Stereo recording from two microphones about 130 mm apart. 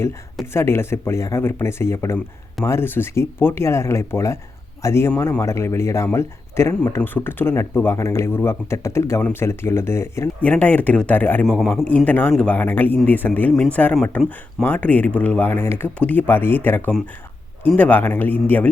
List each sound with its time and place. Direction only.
0.5 s speech: 20° left (ahead or behind)
11.4 s a man's voice: 5° left (ahead or behind)